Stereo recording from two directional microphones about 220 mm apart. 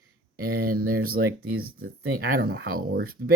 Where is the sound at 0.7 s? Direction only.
40° right (ahead or behind).